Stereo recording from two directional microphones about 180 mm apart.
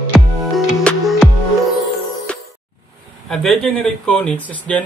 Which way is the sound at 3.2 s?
Centre (ahead or behind).